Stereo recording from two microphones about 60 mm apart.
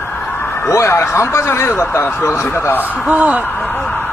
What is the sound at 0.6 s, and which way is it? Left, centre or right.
Speech, left.